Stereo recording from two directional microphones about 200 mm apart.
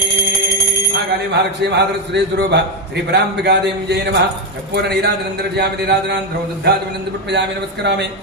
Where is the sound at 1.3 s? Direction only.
60° right (ahead or behind).